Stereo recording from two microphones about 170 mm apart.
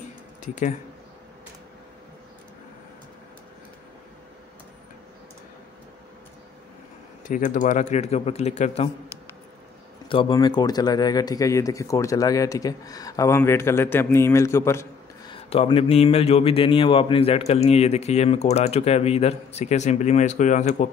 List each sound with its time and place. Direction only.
0.4 s speech: 50° left (ahead or behind)
7.2 s a man's voice: 50° left (ahead or behind)
10.0 s speech: 30° left (ahead or behind)
15.5 s a man's voice: 35° left (ahead or behind)